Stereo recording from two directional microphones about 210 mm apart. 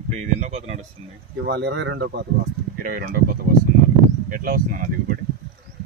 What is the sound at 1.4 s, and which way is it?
Speech, 55° right (ahead or behind).